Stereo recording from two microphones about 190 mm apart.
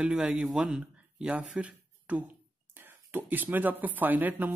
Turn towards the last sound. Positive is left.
turn(degrees=-10)  # may be behind; listen again after turning